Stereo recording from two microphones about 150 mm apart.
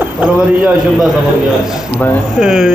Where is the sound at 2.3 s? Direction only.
5° right (ahead or behind).